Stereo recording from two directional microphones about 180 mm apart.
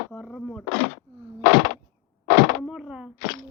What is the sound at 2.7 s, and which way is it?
Speech, 5° right (ahead or behind).